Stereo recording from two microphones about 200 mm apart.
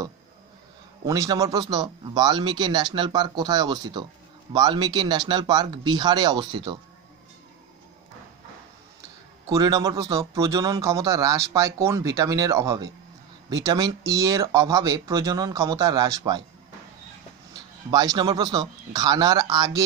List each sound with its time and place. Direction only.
1.0 s speech: 15° right (ahead or behind)
9.5 s a man's voice: 15° right (ahead or behind)
17.9 s speech: 20° right (ahead or behind)